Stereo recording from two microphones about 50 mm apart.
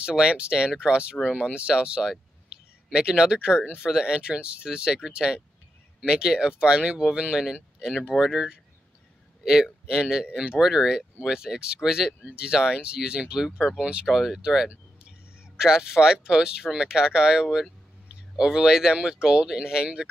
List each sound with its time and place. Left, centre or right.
0.0 s a man's voice: centre
14.0 s speech: centre